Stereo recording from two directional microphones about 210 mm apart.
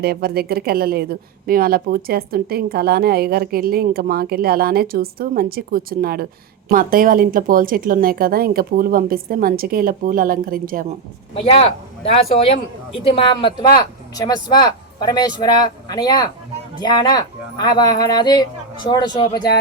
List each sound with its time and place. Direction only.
0.0 s a woman's voice: 45° right (ahead or behind)
12.1 s speech: 25° left (ahead or behind)